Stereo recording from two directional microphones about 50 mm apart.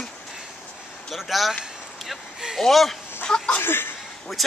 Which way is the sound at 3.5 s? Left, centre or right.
Left.